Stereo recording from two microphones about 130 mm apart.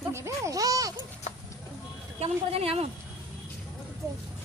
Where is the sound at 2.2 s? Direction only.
50° right (ahead or behind).